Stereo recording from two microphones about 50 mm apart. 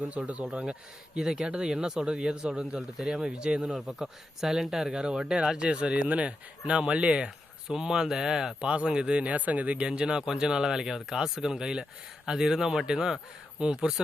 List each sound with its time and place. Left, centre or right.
0.1 s speech: right
3.8 s speech: centre; by 7.3 s right
7.7 s speech: centre